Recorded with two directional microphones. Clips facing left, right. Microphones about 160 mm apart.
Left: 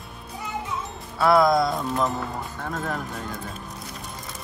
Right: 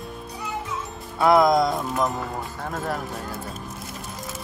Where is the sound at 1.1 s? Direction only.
20° right (ahead or behind).